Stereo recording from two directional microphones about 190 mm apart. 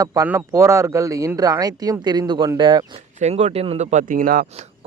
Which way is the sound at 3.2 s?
35° right (ahead or behind).